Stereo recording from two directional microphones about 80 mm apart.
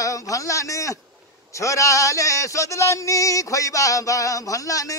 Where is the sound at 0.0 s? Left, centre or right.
Left.